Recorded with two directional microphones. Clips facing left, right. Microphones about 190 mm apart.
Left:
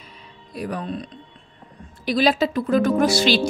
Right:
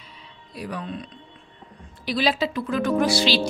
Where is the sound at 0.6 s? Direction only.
45° left (ahead or behind).